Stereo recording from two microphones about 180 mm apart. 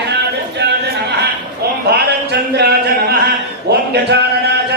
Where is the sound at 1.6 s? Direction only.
60° right (ahead or behind).